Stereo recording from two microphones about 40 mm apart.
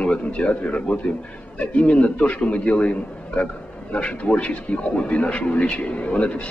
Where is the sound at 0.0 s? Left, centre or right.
Left.